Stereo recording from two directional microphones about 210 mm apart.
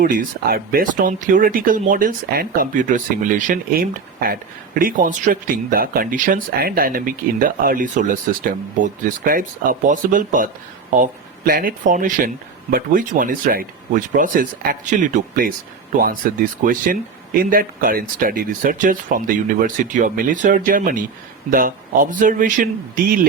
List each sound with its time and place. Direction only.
0.0 s speech: 40° right (ahead or behind)